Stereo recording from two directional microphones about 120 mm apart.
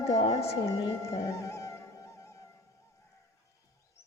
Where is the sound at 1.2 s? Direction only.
25° left (ahead or behind).